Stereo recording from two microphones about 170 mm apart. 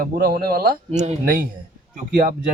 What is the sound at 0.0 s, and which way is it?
Speech, 55° right (ahead or behind).